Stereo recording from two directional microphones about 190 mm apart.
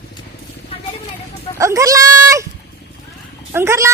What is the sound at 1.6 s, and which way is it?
Goat, 15° right (ahead or behind).